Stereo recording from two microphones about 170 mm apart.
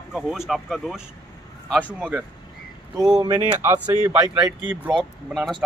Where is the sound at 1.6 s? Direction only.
10° left (ahead or behind).